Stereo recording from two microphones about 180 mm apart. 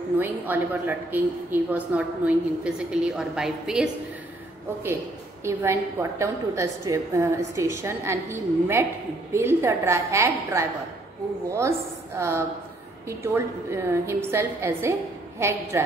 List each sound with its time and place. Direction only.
0.2 s a woman's voice: 10° right (ahead or behind)
5.4 s a woman's voice: 15° right (ahead or behind)